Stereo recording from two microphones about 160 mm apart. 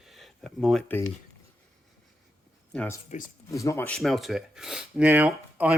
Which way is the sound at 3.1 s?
50° left (ahead or behind).